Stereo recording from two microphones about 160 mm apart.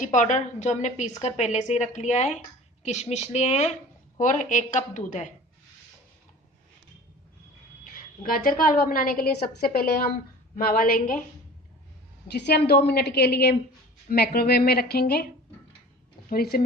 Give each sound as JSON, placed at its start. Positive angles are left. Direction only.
{"t": 0.0, "sound": "speech", "side_deg": 50}
{"t": 8.2, "sound": "a woman's voice", "side_deg": 60}
{"t": 12.3, "sound": "a woman's voice", "side_deg": 90}
{"t": 14.1, "sound": "a woman's voice", "side_deg": 75}
{"t": 16.3, "sound": "a woman's voice", "side_deg": 70}